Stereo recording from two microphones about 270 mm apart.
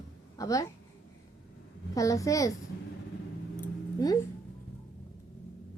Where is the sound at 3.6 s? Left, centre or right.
Centre.